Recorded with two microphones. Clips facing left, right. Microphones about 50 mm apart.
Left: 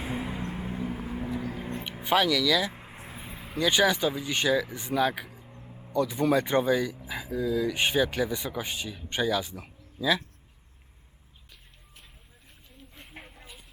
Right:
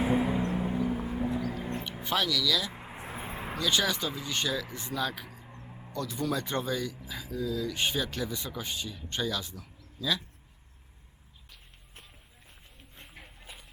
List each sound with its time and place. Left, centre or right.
0.0 s vehicle: centre
2.7 s vehicle: centre
3.0 s vehicle: right
3.6 s speech: left
5.6 s a sound: centre
5.9 s speech: centre